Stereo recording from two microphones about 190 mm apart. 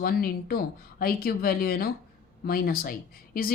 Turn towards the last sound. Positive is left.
turn(degrees=50)  # may be behind; listen again after turning